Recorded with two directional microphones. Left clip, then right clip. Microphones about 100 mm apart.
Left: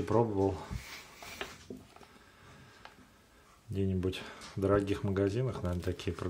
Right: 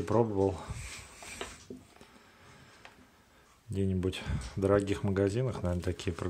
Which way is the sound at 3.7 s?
30° right (ahead or behind).